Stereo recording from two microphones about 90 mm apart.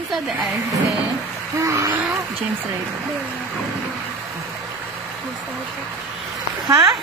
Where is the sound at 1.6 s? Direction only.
35° right (ahead or behind).